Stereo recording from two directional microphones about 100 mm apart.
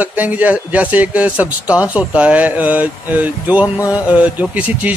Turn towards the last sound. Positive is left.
turn(degrees=-15)  # may be behind; listen again after turning